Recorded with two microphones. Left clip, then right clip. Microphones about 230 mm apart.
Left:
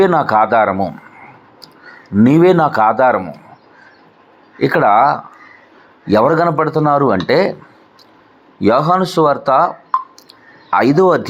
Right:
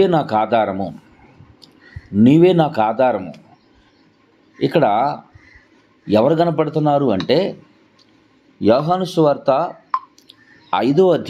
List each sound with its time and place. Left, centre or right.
0.0 s speech: centre
4.6 s speech: centre
6.1 s speech: centre
8.6 s speech: centre